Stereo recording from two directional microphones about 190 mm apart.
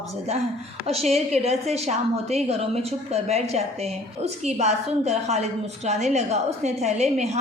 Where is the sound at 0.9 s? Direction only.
35° right (ahead or behind).